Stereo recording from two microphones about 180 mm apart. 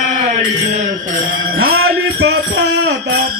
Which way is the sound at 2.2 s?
70° right (ahead or behind).